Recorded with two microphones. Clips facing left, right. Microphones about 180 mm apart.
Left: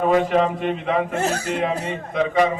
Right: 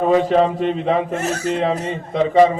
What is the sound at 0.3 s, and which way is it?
Speech, 30° right (ahead or behind).